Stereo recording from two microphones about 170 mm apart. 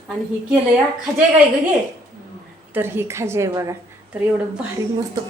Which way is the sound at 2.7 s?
15° right (ahead or behind).